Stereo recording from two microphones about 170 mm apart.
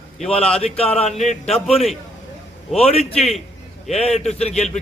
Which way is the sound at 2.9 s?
40° left (ahead or behind).